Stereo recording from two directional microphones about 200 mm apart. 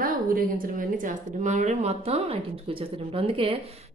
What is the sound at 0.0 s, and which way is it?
Speech, 45° right (ahead or behind).